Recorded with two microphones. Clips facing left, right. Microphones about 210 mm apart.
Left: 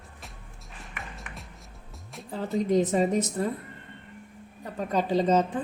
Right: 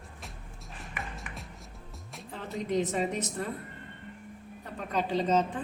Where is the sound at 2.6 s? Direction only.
40° left (ahead or behind).